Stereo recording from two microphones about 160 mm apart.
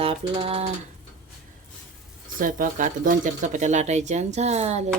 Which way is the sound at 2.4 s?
55° right (ahead or behind).